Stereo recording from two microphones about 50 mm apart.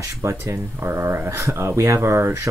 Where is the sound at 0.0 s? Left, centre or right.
Right.